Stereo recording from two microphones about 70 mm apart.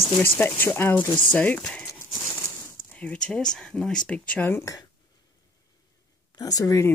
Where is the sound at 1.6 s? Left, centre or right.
Centre.